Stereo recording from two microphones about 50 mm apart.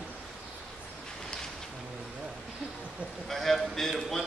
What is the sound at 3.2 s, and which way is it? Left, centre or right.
A man's voice, centre.